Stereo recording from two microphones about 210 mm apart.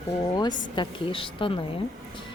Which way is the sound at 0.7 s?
25° left (ahead or behind).